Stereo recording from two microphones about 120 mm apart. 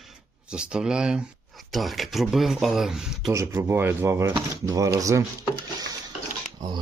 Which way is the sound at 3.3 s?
25° right (ahead or behind).